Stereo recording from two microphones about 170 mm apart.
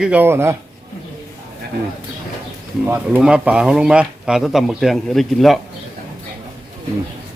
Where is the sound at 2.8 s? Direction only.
10° right (ahead or behind).